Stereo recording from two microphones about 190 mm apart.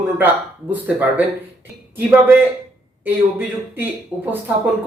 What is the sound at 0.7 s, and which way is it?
Speech, 10° right (ahead or behind).